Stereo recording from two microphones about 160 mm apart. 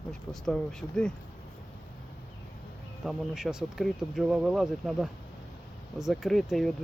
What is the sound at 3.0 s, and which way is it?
Speech, centre (ahead or behind).